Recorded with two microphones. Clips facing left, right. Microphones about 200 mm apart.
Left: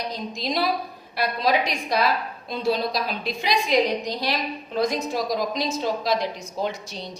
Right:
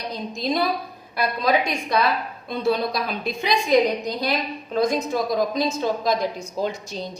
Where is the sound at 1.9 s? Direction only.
55° right (ahead or behind).